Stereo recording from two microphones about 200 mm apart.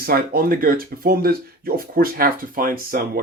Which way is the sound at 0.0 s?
50° right (ahead or behind).